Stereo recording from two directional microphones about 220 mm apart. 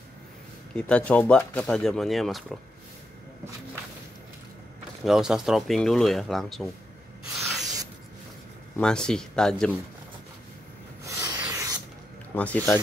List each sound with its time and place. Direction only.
0.7 s speech: 5° left (ahead or behind)
5.0 s speech: centre (ahead or behind)
7.6 s spray: 15° right (ahead or behind)
8.7 s speech: 5° left (ahead or behind)
11.1 s a sound: 15° right (ahead or behind)
11.4 s spray: 15° right (ahead or behind)
12.4 s speech: 5° left (ahead or behind)